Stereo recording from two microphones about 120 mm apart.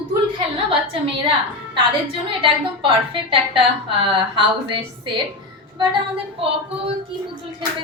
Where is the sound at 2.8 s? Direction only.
50° right (ahead or behind).